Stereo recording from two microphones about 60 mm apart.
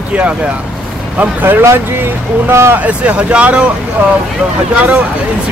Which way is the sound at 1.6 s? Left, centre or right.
Right.